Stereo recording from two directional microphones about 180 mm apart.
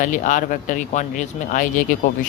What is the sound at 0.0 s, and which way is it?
Speech, 45° left (ahead or behind).